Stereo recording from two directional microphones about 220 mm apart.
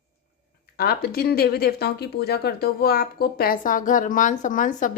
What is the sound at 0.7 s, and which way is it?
Speech, 45° left (ahead or behind).